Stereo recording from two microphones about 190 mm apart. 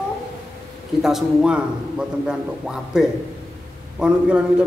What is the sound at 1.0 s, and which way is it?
A man's voice, centre (ahead or behind).